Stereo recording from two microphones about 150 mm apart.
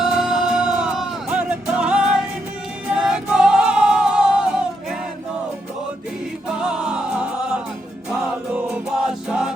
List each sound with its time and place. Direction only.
0.0 s music: centre (ahead or behind)
6.6 s music: 5° right (ahead or behind)
8.7 s music: 5° right (ahead or behind)